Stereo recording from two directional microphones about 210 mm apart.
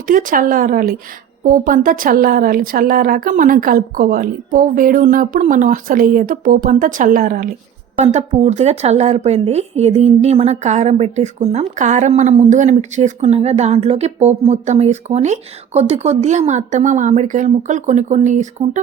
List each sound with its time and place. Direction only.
0.1 s speech: 40° right (ahead or behind)
7.9 s speech: 30° right (ahead or behind)